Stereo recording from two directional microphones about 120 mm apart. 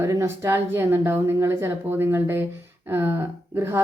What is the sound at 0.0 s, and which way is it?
A woman's voice, 25° right (ahead or behind).